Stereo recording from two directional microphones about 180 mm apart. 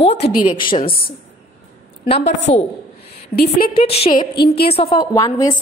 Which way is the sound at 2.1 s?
40° left (ahead or behind).